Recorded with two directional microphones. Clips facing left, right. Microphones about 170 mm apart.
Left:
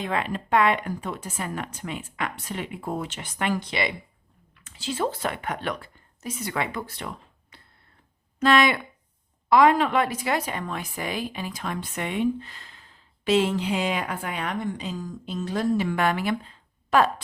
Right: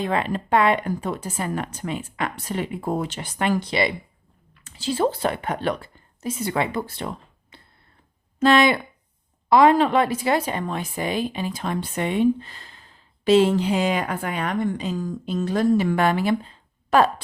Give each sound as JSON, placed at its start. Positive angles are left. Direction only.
{"t": 0.0, "sound": "a woman's voice", "side_deg": -35}